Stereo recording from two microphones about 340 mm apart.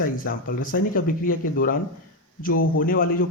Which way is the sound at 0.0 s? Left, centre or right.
Left.